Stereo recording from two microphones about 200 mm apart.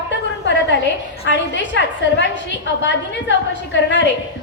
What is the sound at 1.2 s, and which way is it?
A woman's voice, 60° left (ahead or behind).